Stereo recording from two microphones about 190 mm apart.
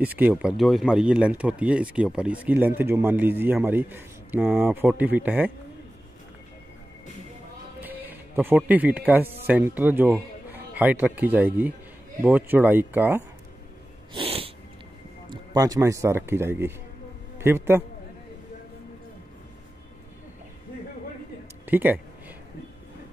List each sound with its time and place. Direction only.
0.0 s speech: 10° right (ahead or behind)
7.8 s speech: 10° right (ahead or behind)
14.1 s sneeze: 30° right (ahead or behind)
15.2 s speech: 20° right (ahead or behind)
21.6 s speech: 10° right (ahead or behind)